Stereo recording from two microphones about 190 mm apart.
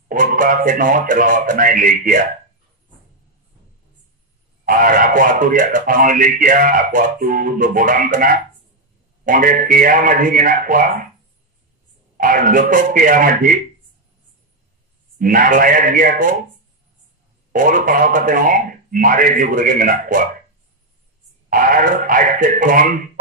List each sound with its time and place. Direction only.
0.1 s speech: 45° right (ahead or behind)
4.6 s speech: 45° right (ahead or behind)
12.2 s speech: 45° right (ahead or behind)
15.1 s speech: 50° right (ahead or behind)
17.5 s speech: 45° right (ahead or behind)
21.5 s speech: 45° right (ahead or behind)